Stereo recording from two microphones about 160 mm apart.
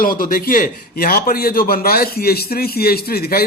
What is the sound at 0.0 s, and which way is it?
A man's voice, 65° left (ahead or behind).